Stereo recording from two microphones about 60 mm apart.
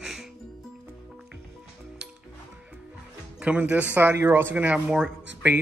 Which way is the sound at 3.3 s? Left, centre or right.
Right.